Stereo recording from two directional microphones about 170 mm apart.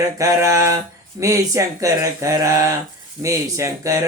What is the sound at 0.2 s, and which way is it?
Speech, 20° right (ahead or behind).